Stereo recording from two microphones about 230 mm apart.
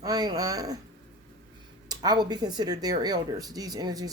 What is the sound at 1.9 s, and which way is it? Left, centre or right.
Speech, centre.